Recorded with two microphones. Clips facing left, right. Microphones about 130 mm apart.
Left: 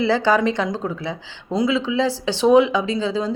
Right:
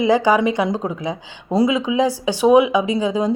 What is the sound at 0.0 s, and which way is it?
A woman's voice, 15° right (ahead or behind).